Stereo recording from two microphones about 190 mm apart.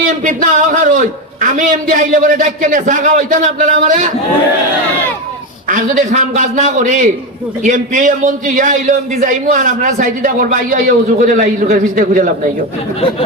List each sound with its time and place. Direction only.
0.3 s a man's voice: 40° right (ahead or behind)
5.6 s a man's voice: 45° right (ahead or behind)